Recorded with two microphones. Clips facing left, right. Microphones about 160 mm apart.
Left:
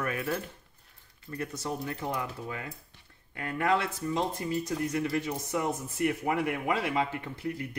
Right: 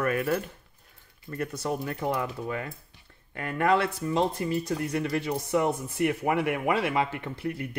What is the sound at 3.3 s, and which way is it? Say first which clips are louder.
Speech: right 3 dB; 60° right (ahead or behind).